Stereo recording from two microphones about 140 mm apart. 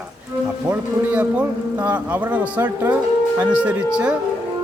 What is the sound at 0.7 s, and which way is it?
A man's voice, 10° right (ahead or behind).